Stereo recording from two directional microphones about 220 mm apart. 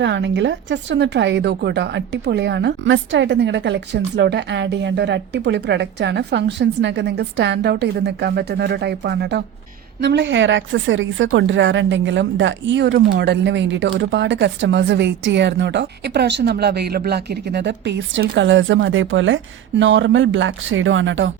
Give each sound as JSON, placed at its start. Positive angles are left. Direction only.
{"t": 0.0, "sound": "a woman's voice", "side_deg": -55}